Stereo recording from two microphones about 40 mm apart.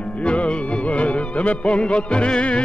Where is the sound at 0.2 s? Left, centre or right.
Left.